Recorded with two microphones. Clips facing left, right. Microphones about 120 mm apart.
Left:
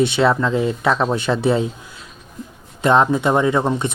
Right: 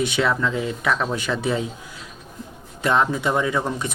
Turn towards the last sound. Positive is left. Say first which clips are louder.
# left 6 dB
turn(degrees=30)  # may be behind; listen again after turning